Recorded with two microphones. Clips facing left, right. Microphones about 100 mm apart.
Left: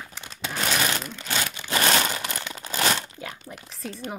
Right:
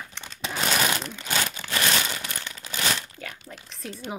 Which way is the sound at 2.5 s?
35° left (ahead or behind).